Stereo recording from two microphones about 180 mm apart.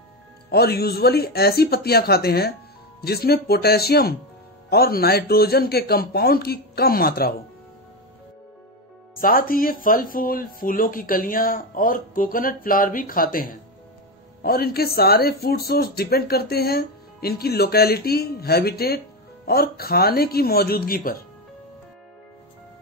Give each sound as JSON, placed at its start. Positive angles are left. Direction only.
{"t": 0.5, "sound": "speech", "side_deg": 60}
{"t": 9.2, "sound": "speech", "side_deg": 50}